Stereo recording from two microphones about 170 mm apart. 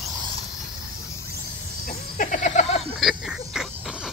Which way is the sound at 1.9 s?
45° left (ahead or behind).